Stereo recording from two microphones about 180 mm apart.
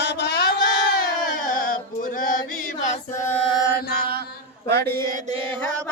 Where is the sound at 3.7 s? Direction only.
55° left (ahead or behind).